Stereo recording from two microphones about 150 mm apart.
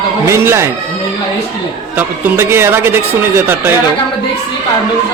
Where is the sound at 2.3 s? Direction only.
15° right (ahead or behind).